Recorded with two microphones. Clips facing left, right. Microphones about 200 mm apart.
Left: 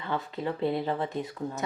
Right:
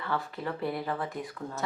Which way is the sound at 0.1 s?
20° left (ahead or behind).